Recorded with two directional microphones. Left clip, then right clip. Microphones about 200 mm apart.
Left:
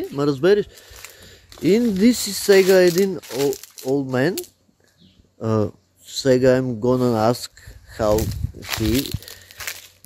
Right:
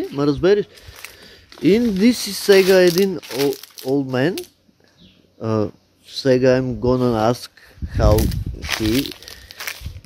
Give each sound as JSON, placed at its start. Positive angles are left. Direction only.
{"t": 0.0, "sound": "speech", "side_deg": 15}
{"t": 1.0, "sound": "walk", "side_deg": 10}
{"t": 1.6, "sound": "speech", "side_deg": 5}
{"t": 3.9, "sound": "speech", "side_deg": 15}
{"t": 5.4, "sound": "speech", "side_deg": 15}
{"t": 8.5, "sound": "walk", "side_deg": 10}